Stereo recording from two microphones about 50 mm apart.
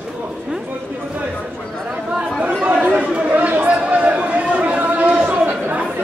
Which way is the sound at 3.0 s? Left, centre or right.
Right.